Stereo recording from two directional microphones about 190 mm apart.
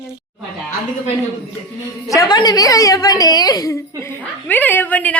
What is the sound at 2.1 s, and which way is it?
A woman's voice, 20° left (ahead or behind).